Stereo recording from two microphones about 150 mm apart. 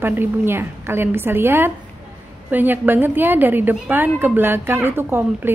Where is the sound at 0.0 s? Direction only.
15° right (ahead or behind).